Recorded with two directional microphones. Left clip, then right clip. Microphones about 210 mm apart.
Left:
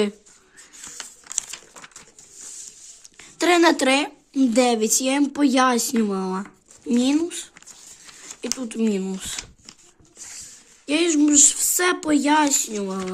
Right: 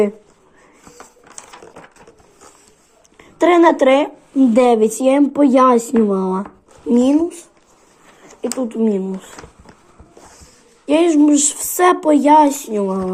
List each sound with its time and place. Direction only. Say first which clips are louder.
3.2 s speech: right 6 dB; 25° left (ahead or behind)
6.1 s speech: right 8 dB; 35° left (ahead or behind)
6.8 s speech: right 7 dB; 25° left (ahead or behind)
8.4 s speech: right 7 dB; 35° left (ahead or behind)
10.8 s speech: right 7 dB; 10° left (ahead or behind)